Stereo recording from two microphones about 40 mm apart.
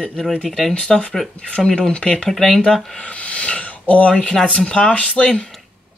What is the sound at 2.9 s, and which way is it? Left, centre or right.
Speech, left.